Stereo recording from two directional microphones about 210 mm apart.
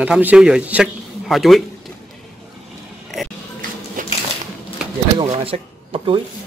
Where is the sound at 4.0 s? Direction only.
40° right (ahead or behind).